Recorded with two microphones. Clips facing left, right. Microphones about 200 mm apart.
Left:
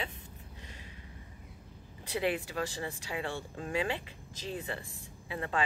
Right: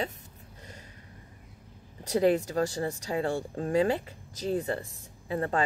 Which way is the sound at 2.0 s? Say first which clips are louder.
Right 8 dB; 40° right (ahead or behind).